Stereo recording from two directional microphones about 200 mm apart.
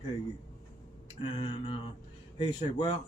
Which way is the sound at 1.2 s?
25° left (ahead or behind).